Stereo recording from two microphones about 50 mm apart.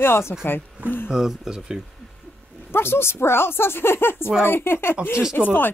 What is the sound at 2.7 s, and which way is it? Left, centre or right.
Speech, left.